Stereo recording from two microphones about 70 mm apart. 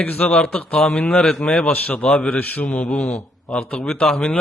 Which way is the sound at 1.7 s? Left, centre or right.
Left.